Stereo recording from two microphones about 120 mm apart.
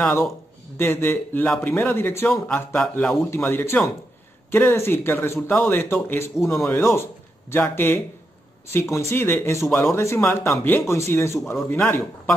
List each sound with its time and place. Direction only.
0.7 s speech: 20° left (ahead or behind)